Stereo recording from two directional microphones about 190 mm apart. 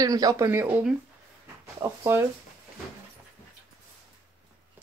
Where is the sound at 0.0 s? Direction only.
20° right (ahead or behind).